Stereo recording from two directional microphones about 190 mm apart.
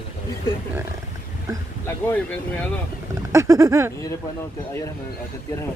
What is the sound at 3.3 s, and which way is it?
Speech, 15° right (ahead or behind).